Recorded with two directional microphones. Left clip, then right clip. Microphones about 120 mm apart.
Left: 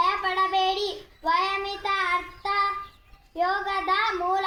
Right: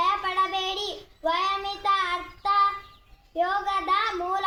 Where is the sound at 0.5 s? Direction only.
35° right (ahead or behind).